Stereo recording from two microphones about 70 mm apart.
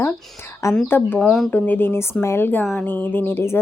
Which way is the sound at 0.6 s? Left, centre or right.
Left.